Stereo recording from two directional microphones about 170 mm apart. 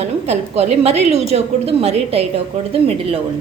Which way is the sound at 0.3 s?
40° right (ahead or behind).